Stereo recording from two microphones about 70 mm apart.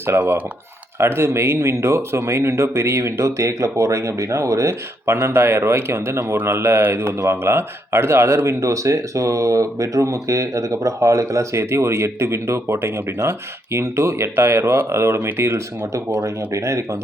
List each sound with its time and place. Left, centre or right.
0.1 s a man's voice: right